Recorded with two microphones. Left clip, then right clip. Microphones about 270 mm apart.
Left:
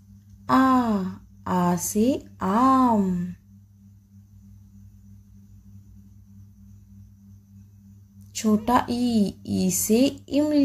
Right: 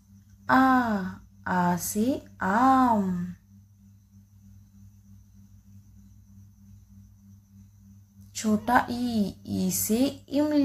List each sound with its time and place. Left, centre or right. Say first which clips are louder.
0.5 s speech: left 1 dB; left
8.3 s speech: left 2 dB; centre